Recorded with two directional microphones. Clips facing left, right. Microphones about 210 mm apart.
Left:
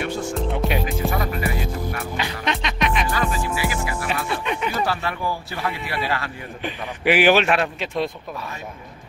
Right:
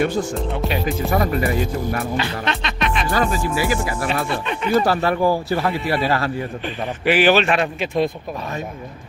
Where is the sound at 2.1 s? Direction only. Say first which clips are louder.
Right 3 dB; 15° left (ahead or behind).